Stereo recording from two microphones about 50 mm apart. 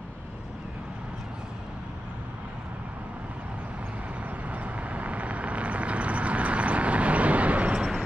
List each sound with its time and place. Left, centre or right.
4.5 s vehicle: right